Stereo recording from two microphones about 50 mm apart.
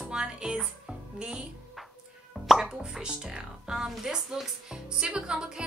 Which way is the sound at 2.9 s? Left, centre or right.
Centre.